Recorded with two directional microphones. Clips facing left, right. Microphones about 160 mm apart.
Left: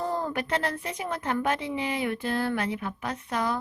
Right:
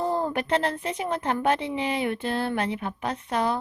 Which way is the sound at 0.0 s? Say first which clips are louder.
Right 3 dB; 15° right (ahead or behind).